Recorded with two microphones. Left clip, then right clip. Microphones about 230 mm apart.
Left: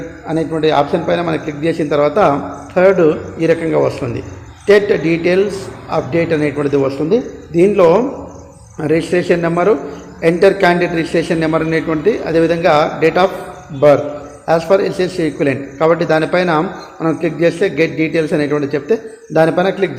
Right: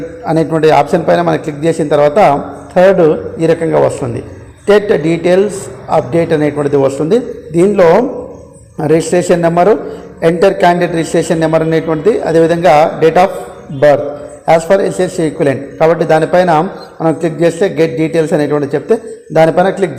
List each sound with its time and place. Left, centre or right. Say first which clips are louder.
0.3 s a man's voice: right 6 dB; right; by 19.9 s centre